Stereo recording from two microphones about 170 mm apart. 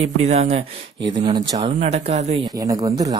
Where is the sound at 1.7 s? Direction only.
40° right (ahead or behind).